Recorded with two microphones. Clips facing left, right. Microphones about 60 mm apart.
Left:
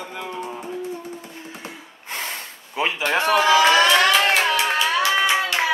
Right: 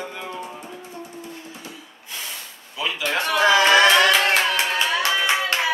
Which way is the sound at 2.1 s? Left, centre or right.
Left.